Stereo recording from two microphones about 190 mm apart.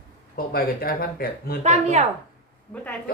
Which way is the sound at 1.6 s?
35° right (ahead or behind).